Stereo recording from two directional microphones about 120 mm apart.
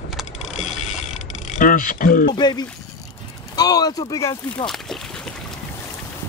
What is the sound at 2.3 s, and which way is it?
Speech, 35° left (ahead or behind).